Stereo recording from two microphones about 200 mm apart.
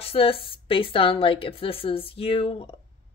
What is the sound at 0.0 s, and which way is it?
Speech, 30° left (ahead or behind).